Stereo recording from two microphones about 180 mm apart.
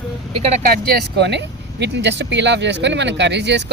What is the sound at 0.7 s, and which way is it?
Speech, 60° right (ahead or behind).